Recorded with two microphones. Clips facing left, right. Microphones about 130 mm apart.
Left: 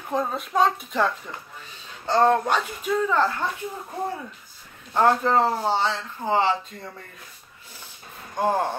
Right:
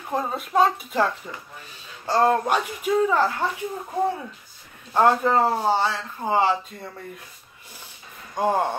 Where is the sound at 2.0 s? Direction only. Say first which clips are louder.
Even; 10° right (ahead or behind).